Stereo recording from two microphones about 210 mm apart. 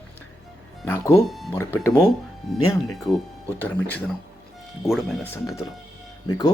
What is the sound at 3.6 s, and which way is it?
Speech, 5° left (ahead or behind).